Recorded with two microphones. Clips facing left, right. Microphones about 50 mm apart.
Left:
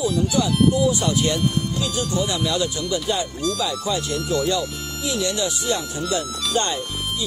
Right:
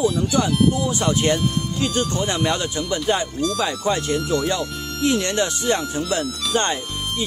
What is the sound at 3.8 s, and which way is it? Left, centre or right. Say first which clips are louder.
Speech: right 3 dB; right.